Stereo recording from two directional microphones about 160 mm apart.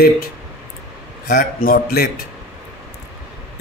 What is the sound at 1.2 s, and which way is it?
Speech, 70° left (ahead or behind).